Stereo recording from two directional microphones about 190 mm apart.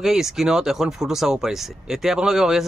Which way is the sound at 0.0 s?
Centre (ahead or behind).